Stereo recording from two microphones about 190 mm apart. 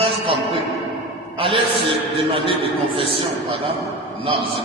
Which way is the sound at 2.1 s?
30° right (ahead or behind).